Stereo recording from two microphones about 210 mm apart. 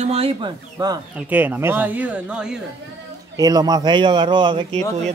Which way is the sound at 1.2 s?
10° right (ahead or behind).